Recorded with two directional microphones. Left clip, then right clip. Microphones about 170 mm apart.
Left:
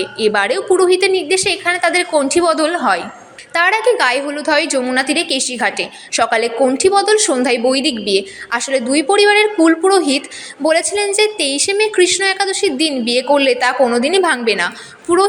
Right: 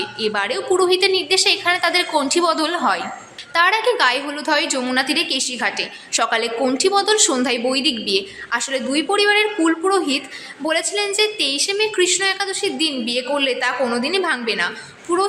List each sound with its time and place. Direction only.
0.2 s a woman's voice: 25° left (ahead or behind)